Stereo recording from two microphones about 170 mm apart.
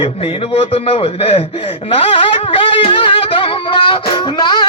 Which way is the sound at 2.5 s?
30° left (ahead or behind).